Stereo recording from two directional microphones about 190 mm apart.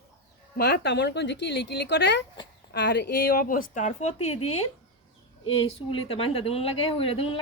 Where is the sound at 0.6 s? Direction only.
60° left (ahead or behind); by 4.6 s 35° left (ahead or behind).